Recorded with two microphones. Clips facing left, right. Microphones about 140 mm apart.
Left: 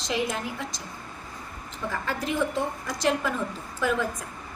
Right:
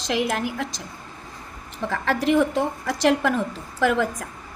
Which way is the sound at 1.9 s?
90° right.